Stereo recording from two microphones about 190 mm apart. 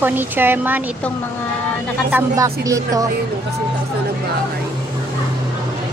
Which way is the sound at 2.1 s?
15° right (ahead or behind).